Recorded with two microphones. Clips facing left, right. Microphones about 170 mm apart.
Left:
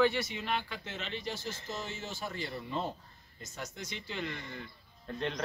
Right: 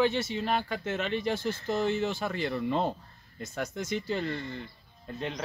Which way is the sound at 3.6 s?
50° right (ahead or behind).